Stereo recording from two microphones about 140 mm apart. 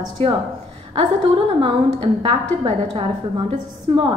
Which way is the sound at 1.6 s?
40° right (ahead or behind).